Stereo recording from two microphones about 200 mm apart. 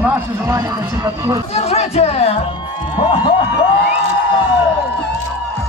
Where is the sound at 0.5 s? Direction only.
20° right (ahead or behind).